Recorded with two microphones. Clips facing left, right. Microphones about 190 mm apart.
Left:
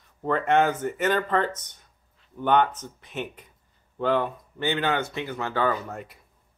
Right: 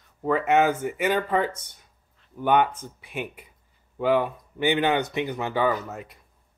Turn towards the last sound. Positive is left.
turn(degrees=0)  # may be behind; listen again after turning